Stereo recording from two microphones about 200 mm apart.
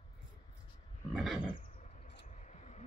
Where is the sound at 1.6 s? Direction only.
35° left (ahead or behind).